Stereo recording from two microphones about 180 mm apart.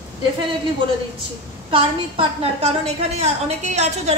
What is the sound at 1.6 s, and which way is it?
A woman's voice, 30° right (ahead or behind).